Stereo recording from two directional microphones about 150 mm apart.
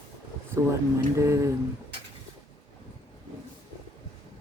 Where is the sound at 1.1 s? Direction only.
20° right (ahead or behind).